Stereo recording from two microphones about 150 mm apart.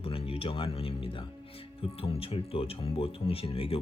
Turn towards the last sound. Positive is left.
turn(degrees=40)  # may be behind; listen again after turning